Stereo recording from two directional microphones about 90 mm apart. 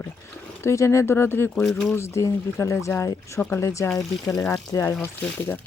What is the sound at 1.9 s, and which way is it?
Speech, 30° left (ahead or behind).